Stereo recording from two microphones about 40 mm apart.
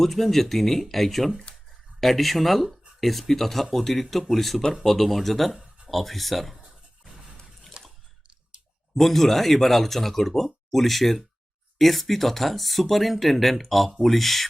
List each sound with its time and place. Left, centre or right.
0.0 s speech: centre
7.8 s a sound: right
9.0 s speech: centre